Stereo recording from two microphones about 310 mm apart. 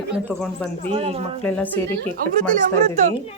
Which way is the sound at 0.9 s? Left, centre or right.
Centre.